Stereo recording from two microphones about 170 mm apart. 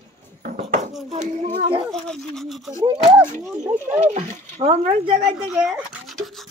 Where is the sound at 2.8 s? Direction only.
25° right (ahead or behind).